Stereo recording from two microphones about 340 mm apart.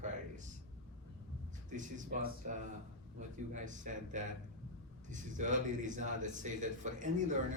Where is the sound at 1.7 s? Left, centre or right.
Right.